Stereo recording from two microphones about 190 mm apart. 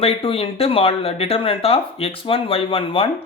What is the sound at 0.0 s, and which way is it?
Speech, 30° left (ahead or behind).